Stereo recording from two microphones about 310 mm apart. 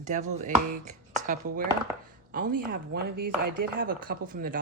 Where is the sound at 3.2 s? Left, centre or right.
Right.